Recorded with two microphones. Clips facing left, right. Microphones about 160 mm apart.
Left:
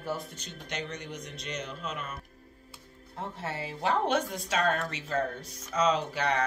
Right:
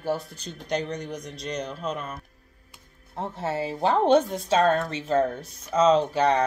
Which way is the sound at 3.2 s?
30° right (ahead or behind).